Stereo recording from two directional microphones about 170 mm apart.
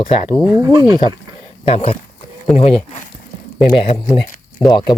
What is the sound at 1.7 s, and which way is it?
Speech, 40° left (ahead or behind).